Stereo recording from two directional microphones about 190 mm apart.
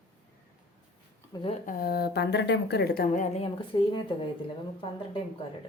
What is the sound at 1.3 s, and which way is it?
Speech, 20° left (ahead or behind).